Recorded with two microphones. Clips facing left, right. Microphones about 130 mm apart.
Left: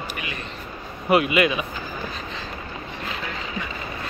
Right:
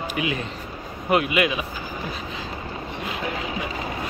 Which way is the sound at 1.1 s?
Centre (ahead or behind).